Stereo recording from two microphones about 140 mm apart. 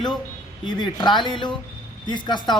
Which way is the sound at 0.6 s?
30° left (ahead or behind).